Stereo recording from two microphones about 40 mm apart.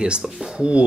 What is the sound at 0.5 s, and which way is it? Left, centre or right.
Speech, right.